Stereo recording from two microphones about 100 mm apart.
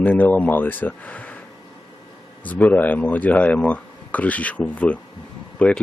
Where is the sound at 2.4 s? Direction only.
15° left (ahead or behind).